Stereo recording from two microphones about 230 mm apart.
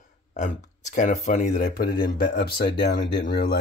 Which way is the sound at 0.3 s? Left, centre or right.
Left.